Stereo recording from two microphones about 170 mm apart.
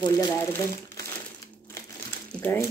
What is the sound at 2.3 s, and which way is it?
Speech, 10° left (ahead or behind).